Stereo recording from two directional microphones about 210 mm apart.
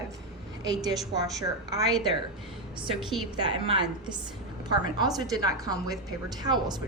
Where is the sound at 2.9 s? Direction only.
Centre (ahead or behind).